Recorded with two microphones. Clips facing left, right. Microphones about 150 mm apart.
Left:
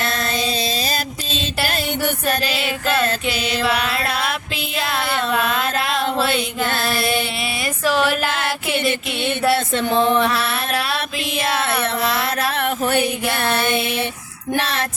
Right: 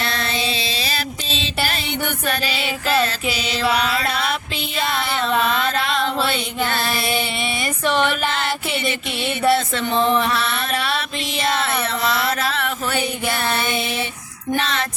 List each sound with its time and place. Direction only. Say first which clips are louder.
0.0 s mantra: left 2 dB; 45° left (ahead or behind)
2.3 s music: left 2 dB; 45° left (ahead or behind)
2.6 s music: even; centre (ahead or behind)
3.3 s music: left 2 dB; 55° left (ahead or behind)
3.6 s music: right 2 dB; centre (ahead or behind)
4.0 s a sound: even; centre (ahead or behind)
9.2 s music: right 1 dB; centre (ahead or behind)
12.4 s a sound: left 3 dB; 55° left (ahead or behind)
13.0 s music: left 3 dB; centre (ahead or behind)